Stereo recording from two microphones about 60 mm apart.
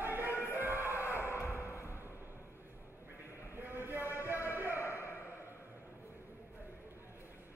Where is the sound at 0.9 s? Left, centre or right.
Left.